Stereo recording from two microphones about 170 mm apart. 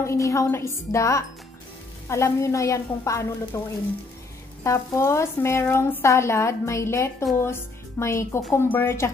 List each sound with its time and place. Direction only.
0.0 s speech: 15° left (ahead or behind)
4.6 s speech: 15° left (ahead or behind)